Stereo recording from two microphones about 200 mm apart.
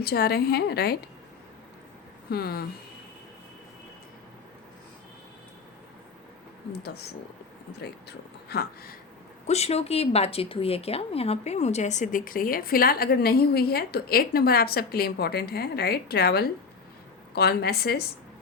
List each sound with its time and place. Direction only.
0.0 s speech: 50° left (ahead or behind)
2.3 s speech: 50° left (ahead or behind)
6.7 s speech: 55° left (ahead or behind)
8.4 s speech: 50° left (ahead or behind)
9.5 s speech: 30° left (ahead or behind); by 18.1 s 50° left (ahead or behind)